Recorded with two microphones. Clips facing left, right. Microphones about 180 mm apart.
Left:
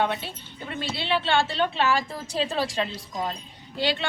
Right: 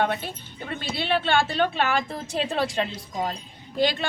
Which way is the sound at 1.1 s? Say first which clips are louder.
Right 1 dB; 50° right (ahead or behind).